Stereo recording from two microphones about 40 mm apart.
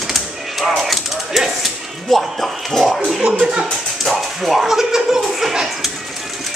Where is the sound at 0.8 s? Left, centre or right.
Centre.